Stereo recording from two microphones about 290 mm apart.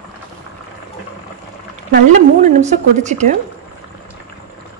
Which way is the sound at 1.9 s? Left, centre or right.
Right.